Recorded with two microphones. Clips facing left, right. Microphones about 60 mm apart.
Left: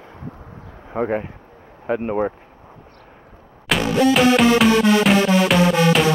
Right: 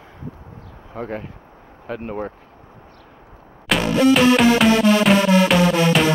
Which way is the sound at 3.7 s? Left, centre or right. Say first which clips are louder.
Right 1 dB; centre.